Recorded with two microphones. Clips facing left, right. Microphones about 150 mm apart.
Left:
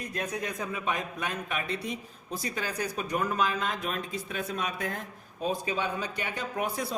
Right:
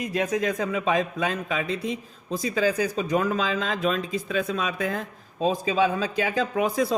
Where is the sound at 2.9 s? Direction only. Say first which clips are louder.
Right 6 dB; 90° right.